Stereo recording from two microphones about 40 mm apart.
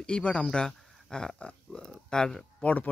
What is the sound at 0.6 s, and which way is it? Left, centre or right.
Speech, centre.